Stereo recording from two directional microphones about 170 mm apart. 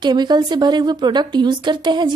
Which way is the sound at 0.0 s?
25° right (ahead or behind).